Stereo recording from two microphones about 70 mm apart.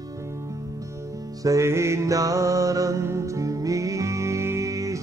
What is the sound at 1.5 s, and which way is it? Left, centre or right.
Mantra, right.